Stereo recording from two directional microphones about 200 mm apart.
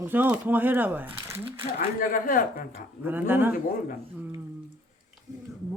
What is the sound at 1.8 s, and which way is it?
A woman's voice, 45° left (ahead or behind).